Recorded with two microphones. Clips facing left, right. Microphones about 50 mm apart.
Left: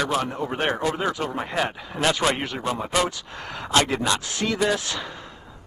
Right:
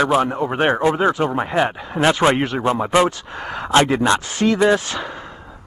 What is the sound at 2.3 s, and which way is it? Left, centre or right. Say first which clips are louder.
Speech: right 8 dB; centre.